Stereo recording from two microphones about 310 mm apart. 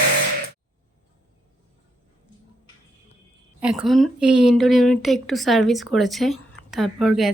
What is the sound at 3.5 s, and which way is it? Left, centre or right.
A woman's voice, centre.